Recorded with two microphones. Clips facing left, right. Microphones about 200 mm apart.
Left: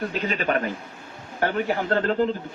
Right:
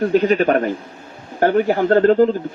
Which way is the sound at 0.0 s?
40° right (ahead or behind).